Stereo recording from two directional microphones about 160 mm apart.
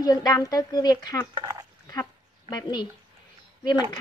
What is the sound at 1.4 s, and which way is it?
Speech, 25° right (ahead or behind).